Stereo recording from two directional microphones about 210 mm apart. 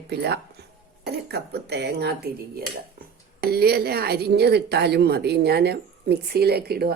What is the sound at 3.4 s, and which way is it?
Speech, 50° right (ahead or behind).